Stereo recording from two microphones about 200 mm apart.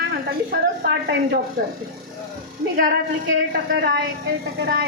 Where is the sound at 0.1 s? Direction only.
50° right (ahead or behind).